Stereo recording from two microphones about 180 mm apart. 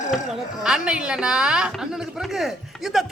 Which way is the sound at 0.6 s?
5° right (ahead or behind).